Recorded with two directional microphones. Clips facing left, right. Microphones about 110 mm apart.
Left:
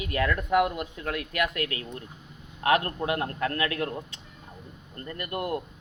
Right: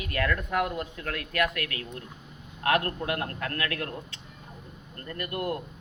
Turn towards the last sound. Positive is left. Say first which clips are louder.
# left 1 dB
turn(degrees=20)  # may be behind; listen again after turning